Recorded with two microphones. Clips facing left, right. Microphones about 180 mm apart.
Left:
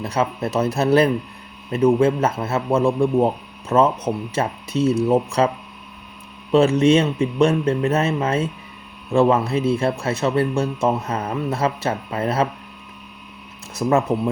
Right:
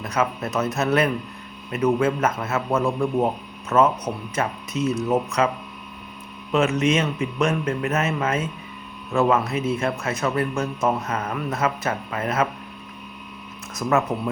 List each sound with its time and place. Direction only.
0.0 s a man's voice: 30° left (ahead or behind)
13.8 s a man's voice: 20° left (ahead or behind)